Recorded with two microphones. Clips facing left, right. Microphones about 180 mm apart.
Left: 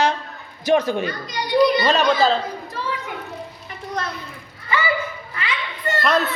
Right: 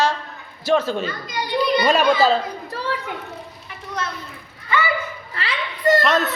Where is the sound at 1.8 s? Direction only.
10° right (ahead or behind).